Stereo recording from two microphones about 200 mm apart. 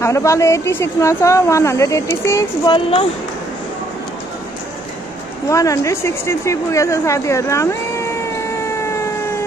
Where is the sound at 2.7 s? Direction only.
25° left (ahead or behind).